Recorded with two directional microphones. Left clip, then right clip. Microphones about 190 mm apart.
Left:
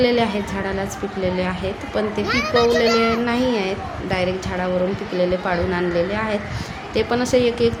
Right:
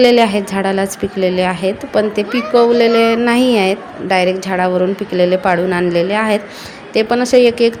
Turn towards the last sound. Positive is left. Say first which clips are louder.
# right 7 dB
turn(degrees=-30)  # may be behind; listen again after turning